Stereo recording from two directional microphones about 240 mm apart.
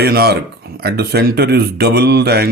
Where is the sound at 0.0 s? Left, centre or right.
Right.